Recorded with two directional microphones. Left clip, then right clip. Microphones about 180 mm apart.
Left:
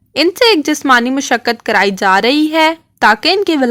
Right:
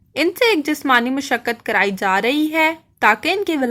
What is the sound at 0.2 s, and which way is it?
A woman's voice, 35° left (ahead or behind).